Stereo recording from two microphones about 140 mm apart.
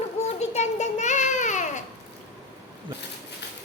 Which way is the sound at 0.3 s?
55° left (ahead or behind).